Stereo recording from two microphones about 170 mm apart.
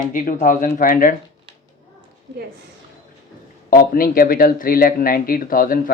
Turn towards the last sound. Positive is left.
turn(degrees=55)  # may be behind; listen again after turning